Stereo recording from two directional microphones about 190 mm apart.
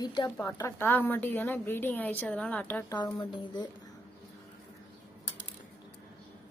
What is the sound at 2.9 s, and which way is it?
Speech, 20° left (ahead or behind).